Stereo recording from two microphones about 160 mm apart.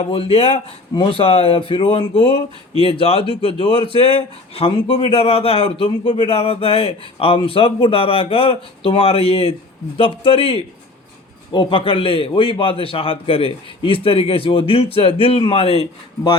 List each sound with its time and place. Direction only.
0.0 s speech: 35° left (ahead or behind)